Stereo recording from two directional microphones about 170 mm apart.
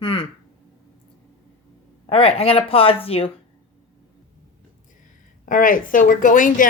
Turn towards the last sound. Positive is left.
turn(degrees=50)  # may be behind; listen again after turning